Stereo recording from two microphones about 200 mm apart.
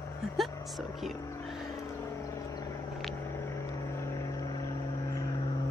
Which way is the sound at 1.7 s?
15° left (ahead or behind).